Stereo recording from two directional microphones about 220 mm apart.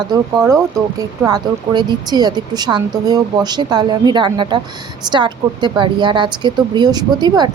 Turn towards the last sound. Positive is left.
turn(degrees=-20)  # may be behind; listen again after turning